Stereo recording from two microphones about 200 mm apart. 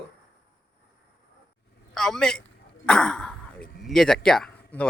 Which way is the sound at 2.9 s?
5° left (ahead or behind).